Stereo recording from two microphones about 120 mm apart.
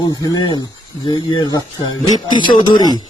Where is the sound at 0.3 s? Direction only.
35° left (ahead or behind).